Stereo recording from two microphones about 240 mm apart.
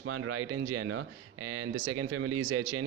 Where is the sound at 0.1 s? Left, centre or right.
Right.